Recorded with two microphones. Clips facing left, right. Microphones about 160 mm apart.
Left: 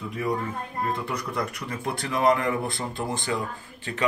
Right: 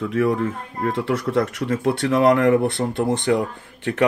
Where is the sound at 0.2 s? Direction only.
90° right.